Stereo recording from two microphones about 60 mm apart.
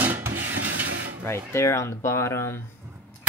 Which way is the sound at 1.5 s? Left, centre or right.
Left.